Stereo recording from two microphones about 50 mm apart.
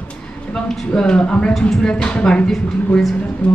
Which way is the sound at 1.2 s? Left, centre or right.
Left.